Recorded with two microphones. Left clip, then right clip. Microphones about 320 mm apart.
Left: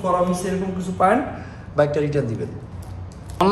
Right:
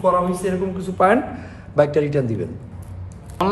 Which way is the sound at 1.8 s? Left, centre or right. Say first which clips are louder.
Right 2 dB; right.